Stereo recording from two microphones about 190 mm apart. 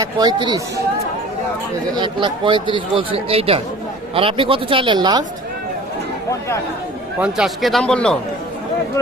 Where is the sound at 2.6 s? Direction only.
25° left (ahead or behind).